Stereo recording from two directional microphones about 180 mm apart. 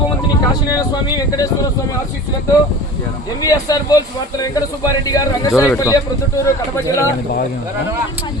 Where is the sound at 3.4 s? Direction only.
20° left (ahead or behind).